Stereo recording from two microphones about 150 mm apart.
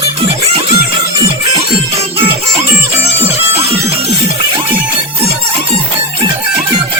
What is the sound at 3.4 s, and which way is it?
Music, 20° right (ahead or behind).